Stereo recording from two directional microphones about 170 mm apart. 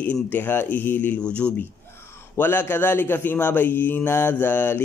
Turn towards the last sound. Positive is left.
turn(degrees=10)  # may be behind; listen again after turning